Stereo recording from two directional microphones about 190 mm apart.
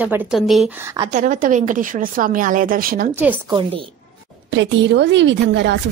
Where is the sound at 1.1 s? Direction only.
45° right (ahead or behind).